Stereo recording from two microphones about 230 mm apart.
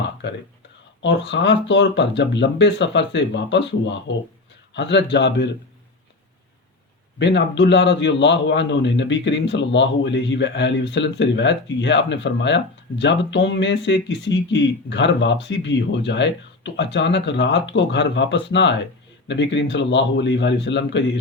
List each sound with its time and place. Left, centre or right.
0.2 s a man's voice: left
7.2 s a man's voice: left